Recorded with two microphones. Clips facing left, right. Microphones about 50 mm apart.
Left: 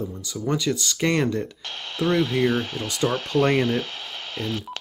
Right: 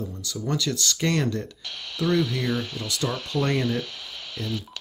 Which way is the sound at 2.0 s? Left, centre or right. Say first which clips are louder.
Left 3 dB; left.